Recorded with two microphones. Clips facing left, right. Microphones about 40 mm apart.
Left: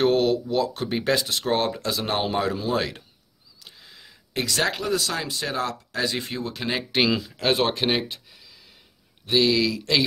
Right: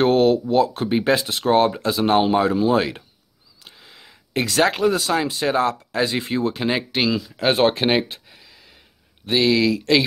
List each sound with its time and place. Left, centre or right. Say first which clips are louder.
0.0 s a sound: right 4 dB; right
0.8 s speech: right 5 dB; centre
3.6 s a sound: right 2 dB; right
4.5 s speech: right 6 dB; right
6.9 s speech: right 1 dB; centre
7.3 s speech: right 8 dB; centre
9.2 s speech: right 3 dB; right